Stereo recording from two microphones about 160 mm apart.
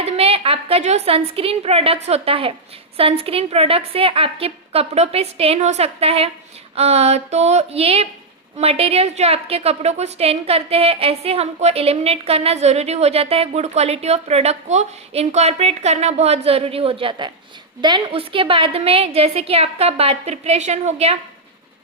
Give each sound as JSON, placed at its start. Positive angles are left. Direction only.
{"t": 0.0, "sound": "a woman's voice", "side_deg": -40}